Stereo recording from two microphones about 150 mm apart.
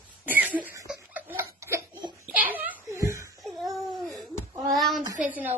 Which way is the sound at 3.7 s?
Centre (ahead or behind).